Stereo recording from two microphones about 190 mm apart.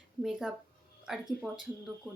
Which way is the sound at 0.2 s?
Centre (ahead or behind).